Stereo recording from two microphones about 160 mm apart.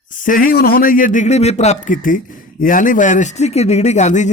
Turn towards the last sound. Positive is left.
turn(degrees=45)  # may be behind; listen again after turning